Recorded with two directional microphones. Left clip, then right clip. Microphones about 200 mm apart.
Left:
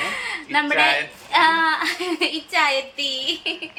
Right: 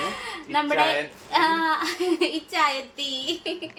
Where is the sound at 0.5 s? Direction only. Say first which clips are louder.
Left 4 dB; 5° left (ahead or behind).